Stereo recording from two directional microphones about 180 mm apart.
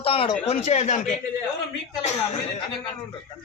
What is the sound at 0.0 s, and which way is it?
Speech, 30° left (ahead or behind).